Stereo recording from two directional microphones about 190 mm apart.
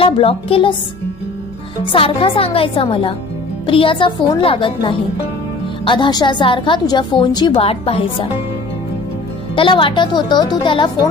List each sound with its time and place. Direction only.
0.0 s a woman's voice: 30° left (ahead or behind)
1.8 s a woman's voice: 30° left (ahead or behind)
9.6 s a woman's voice: 25° left (ahead or behind)